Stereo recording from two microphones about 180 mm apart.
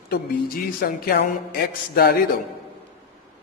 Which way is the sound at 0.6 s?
60° left (ahead or behind).